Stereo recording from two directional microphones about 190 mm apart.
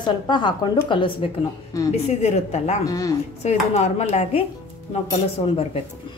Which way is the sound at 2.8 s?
20° left (ahead or behind).